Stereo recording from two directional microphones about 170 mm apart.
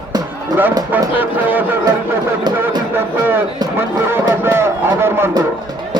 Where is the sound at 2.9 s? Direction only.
10° right (ahead or behind).